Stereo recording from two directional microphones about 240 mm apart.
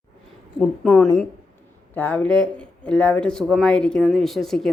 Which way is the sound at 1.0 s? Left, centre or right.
Centre.